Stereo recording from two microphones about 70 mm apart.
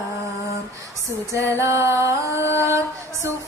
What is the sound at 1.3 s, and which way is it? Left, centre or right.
Music, right.